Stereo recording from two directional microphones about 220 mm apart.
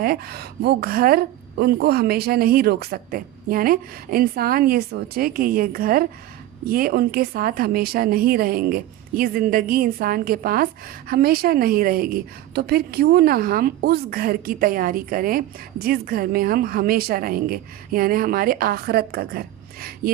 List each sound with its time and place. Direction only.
0.0 s a woman's voice: 45° right (ahead or behind)